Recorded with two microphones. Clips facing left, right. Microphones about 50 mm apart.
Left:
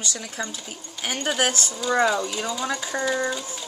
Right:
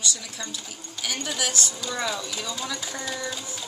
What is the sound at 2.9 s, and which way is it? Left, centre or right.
Speech, left.